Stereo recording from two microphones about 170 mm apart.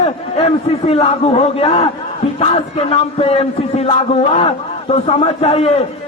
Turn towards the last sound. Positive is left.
turn(degrees=35)  # may be behind; listen again after turning